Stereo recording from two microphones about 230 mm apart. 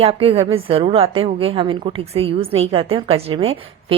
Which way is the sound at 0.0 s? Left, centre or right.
Right.